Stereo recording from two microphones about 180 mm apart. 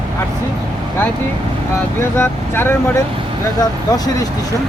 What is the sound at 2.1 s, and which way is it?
Speech, 15° left (ahead or behind).